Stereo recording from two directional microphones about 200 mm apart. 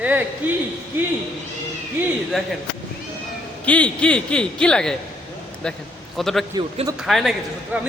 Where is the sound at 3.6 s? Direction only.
5° left (ahead or behind).